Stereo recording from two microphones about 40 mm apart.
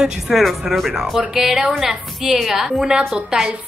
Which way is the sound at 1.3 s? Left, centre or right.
Centre.